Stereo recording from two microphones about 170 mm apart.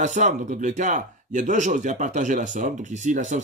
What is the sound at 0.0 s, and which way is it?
Speech, 45° right (ahead or behind).